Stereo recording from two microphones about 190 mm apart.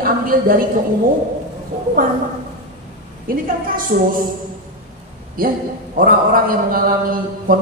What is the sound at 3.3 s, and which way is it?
Speech, 50° right (ahead or behind).